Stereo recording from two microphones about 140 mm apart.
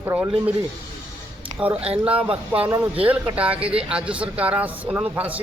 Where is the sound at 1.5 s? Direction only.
10° right (ahead or behind).